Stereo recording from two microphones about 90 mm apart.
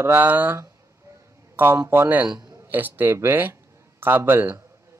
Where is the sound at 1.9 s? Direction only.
25° right (ahead or behind).